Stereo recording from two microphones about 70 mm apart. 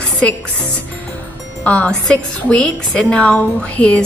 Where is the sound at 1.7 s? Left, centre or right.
Centre.